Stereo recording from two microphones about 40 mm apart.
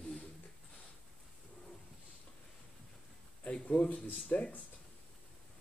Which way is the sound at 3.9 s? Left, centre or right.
Left.